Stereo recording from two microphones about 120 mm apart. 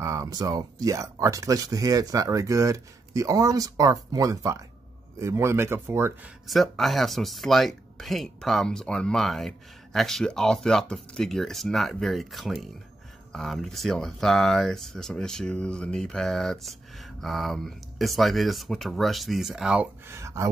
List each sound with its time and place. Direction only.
0.0 s speech: 30° right (ahead or behind)
6.4 s speech: centre (ahead or behind)
20.1 s speech: 25° right (ahead or behind)